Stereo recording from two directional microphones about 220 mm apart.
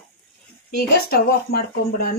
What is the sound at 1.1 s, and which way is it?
Speech, 45° left (ahead or behind).